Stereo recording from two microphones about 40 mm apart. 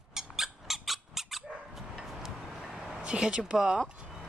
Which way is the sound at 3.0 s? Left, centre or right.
Right.